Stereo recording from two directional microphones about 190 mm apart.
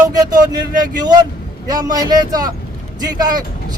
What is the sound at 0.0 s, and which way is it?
Speech, 20° right (ahead or behind).